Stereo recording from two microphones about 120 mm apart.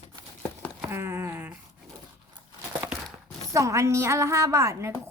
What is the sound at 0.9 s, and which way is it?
Speech, 20° right (ahead or behind).